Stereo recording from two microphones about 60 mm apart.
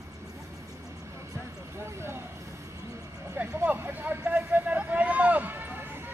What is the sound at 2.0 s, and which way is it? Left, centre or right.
Vehicle, right.